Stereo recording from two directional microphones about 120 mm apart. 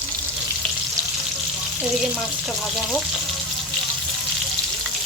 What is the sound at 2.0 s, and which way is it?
Frying, centre (ahead or behind).